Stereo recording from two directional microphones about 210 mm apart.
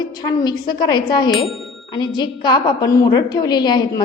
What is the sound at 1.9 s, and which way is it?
A woman's voice, 20° left (ahead or behind).